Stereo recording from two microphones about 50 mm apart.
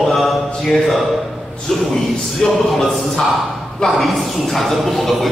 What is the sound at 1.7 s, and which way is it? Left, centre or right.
Music, centre.